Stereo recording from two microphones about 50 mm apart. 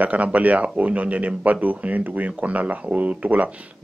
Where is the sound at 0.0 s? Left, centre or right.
Right.